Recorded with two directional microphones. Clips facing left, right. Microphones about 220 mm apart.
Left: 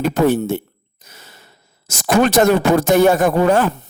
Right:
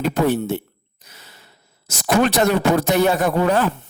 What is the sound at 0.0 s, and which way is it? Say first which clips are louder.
A man's voice: left 3 dB; 45° left (ahead or behind).